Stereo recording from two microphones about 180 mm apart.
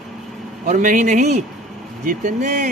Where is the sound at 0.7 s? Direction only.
45° right (ahead or behind).